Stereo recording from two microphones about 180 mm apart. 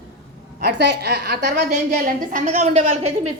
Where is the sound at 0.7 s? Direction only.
65° right (ahead or behind).